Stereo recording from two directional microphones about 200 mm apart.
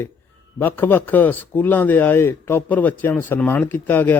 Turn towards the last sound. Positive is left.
turn(degrees=10)  # may be behind; listen again after turning